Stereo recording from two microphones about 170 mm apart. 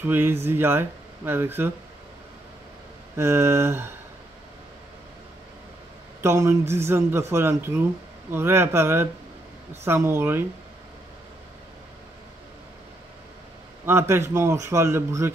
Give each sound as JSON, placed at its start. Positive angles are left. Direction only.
{"t": 0.0, "sound": "speech", "side_deg": -10}
{"t": 3.2, "sound": "speech", "side_deg": -15}
{"t": 6.2, "sound": "speech", "side_deg": -15}
{"t": 13.8, "sound": "speech", "side_deg": -15}